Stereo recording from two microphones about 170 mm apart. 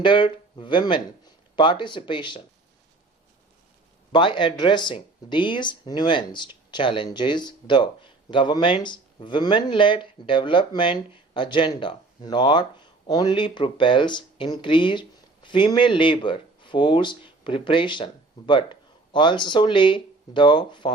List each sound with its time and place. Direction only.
0.0 s speech: 30° left (ahead or behind)
4.1 s speech: 30° left (ahead or behind)